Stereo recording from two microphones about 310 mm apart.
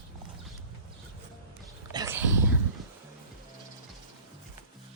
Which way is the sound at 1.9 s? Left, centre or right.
Centre.